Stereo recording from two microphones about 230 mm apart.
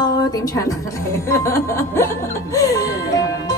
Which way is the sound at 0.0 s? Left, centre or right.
Centre.